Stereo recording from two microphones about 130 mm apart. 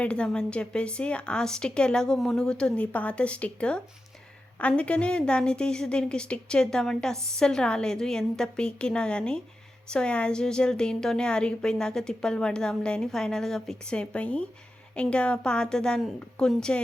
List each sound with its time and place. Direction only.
0.0 s a woman's voice: 5° left (ahead or behind)